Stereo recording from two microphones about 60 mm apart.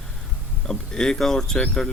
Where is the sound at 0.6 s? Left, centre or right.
Centre.